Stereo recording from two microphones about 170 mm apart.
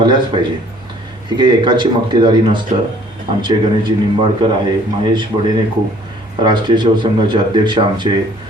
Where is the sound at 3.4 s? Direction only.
30° right (ahead or behind).